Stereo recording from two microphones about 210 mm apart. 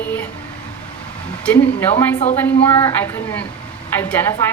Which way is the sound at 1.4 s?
10° left (ahead or behind).